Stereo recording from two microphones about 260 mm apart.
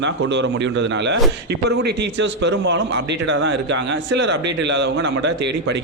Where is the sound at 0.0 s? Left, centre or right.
Right.